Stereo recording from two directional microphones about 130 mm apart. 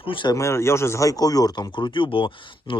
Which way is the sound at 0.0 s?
40° left (ahead or behind).